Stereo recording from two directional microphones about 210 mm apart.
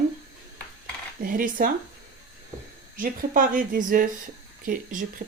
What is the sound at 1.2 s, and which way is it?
Speech, 40° right (ahead or behind).